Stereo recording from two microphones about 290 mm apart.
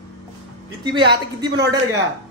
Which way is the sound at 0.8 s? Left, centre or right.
Centre.